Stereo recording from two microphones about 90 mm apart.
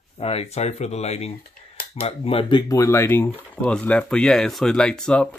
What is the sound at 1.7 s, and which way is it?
Speech, 90° left.